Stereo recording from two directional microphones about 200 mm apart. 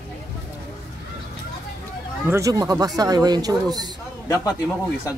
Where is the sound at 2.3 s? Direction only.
15° right (ahead or behind).